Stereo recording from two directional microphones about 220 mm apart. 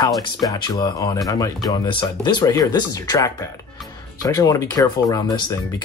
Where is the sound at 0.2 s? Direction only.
15° left (ahead or behind).